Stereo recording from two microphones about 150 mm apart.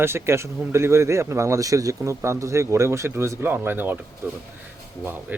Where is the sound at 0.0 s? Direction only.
15° right (ahead or behind).